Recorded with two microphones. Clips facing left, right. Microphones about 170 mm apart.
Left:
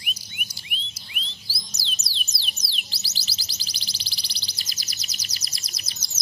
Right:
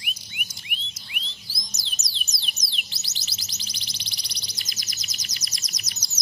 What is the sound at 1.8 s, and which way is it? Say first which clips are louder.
Music: left 4 dB; 30° left (ahead or behind).